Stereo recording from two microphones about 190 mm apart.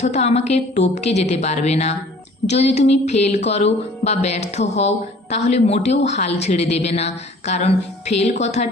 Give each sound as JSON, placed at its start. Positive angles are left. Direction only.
{"t": 0.0, "sound": "speech", "side_deg": 35}